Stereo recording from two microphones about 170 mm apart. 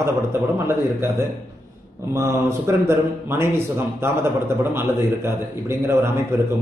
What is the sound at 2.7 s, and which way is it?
A man's voice, 15° right (ahead or behind).